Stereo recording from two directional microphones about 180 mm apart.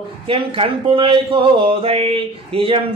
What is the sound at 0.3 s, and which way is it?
Speech, 30° right (ahead or behind).